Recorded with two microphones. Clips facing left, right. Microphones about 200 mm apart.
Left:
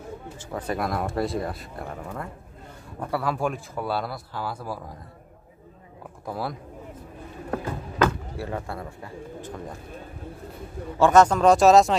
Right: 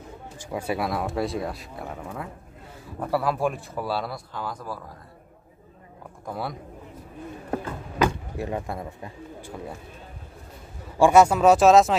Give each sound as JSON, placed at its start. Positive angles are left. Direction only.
{"t": 0.4, "sound": "speech", "side_deg": -10}
{"t": 6.2, "sound": "speech", "side_deg": 0}
{"t": 7.5, "sound": "bird", "side_deg": -20}
{"t": 11.0, "sound": "speech", "side_deg": -10}